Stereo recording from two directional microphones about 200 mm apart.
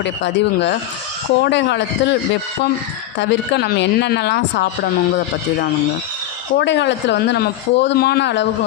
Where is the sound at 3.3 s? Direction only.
55° left (ahead or behind).